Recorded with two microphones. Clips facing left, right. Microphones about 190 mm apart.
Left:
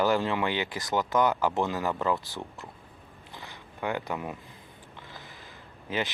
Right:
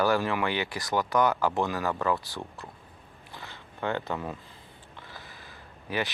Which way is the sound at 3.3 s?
15° left (ahead or behind).